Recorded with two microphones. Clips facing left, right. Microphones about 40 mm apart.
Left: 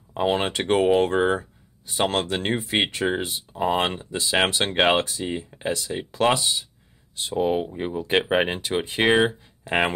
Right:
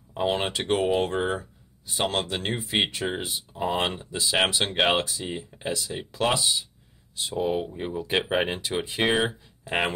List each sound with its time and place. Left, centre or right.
0.1 s speech: centre
1.3 s a sound: left
2.3 s speech: left
3.3 s speech: centre
9.7 s speech: centre